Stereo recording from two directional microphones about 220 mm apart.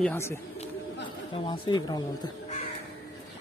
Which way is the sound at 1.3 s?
25° left (ahead or behind).